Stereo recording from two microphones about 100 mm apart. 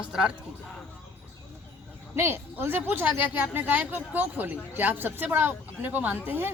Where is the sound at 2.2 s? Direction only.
25° right (ahead or behind).